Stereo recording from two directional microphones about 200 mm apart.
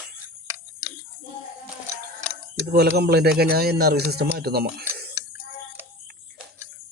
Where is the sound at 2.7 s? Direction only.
55° right (ahead or behind).